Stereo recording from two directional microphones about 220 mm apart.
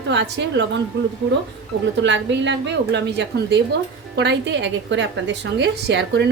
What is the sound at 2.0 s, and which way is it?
A woman's voice, 55° right (ahead or behind).